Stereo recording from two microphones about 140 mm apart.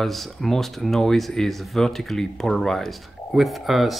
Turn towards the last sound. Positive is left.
turn(degrees=0)  # may be behind; listen again after turning